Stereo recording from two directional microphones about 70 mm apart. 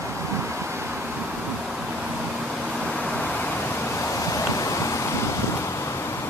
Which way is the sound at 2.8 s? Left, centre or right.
Centre.